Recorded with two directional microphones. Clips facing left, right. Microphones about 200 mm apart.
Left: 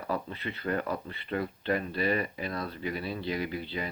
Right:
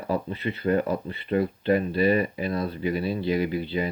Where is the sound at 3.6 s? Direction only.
15° right (ahead or behind).